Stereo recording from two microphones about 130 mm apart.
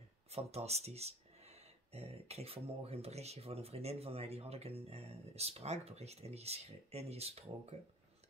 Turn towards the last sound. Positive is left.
turn(degrees=-55)  # may be behind; listen again after turning